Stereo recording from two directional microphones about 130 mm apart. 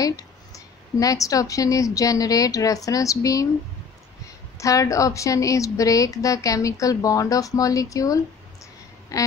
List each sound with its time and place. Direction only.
0.0 s a woman's voice: 25° left (ahead or behind)
4.6 s a woman's voice: 25° left (ahead or behind)